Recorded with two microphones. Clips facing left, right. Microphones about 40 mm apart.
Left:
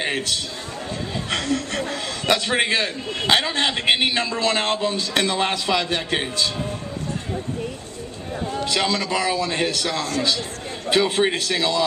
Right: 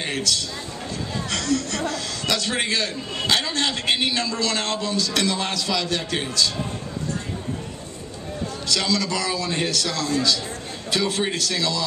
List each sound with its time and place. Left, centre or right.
0.0 s a man's voice: left
8.5 s a man's voice: left